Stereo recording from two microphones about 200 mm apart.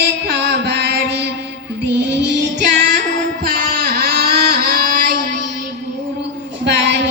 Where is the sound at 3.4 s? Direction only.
50° right (ahead or behind).